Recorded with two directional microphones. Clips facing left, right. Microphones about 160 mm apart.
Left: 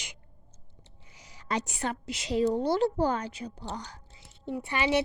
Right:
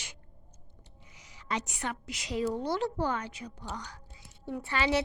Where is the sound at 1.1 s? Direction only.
35° left (ahead or behind).